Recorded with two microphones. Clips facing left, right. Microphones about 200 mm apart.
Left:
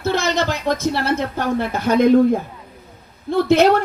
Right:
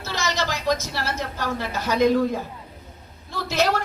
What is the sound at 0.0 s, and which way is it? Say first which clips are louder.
A man's voice: left 7 dB; 55° left (ahead or behind).